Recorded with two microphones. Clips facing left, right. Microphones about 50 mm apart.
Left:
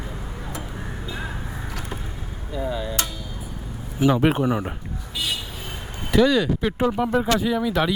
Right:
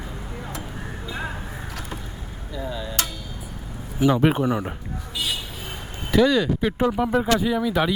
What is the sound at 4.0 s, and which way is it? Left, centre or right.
Speech, centre.